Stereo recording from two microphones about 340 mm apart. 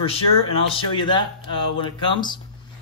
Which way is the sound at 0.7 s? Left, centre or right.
Centre.